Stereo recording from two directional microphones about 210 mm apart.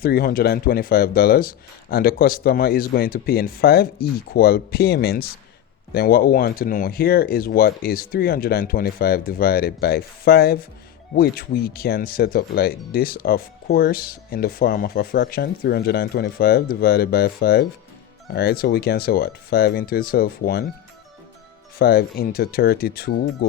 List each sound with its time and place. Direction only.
0.0 s speech: 45° left (ahead or behind)
21.8 s speech: 45° left (ahead or behind)